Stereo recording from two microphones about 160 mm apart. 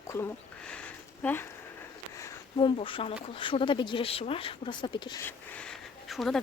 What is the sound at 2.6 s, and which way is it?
Speech, 30° left (ahead or behind).